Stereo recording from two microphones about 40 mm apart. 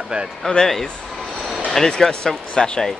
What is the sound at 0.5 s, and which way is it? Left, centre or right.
Speech, left.